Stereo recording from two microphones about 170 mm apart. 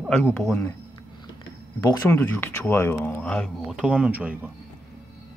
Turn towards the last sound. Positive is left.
turn(degrees=-10)  # may be behind; listen again after turning